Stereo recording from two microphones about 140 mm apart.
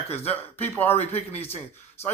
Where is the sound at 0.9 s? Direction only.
45° left (ahead or behind).